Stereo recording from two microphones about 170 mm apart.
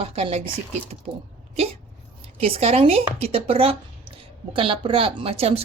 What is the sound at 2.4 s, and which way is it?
Speech, 35° right (ahead or behind).